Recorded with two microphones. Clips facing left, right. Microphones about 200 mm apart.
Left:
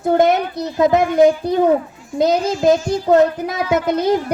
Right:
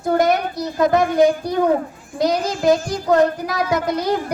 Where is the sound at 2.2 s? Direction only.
25° left (ahead or behind).